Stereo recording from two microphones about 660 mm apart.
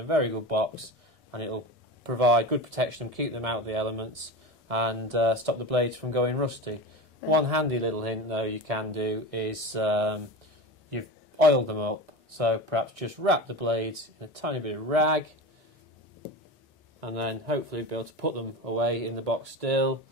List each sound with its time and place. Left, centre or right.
0.1 s speech: right
17.0 s speech: right